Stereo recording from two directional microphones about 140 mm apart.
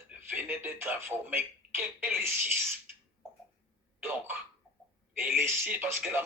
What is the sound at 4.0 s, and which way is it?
Speech, 15° right (ahead or behind).